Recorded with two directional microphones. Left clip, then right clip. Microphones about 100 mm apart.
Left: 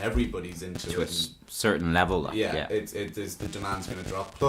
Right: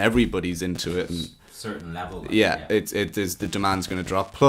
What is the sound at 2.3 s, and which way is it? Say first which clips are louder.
Speech: right 7 dB; 40° right (ahead or behind).